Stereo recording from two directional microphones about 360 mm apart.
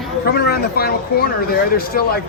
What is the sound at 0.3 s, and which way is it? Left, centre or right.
Speech, left.